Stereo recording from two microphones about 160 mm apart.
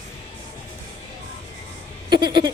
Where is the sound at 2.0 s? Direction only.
30° right (ahead or behind).